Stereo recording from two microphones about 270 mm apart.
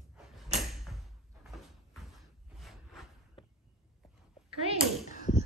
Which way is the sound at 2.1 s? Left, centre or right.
Centre.